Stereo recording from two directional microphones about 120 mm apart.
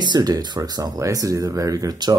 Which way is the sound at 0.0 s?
35° right (ahead or behind).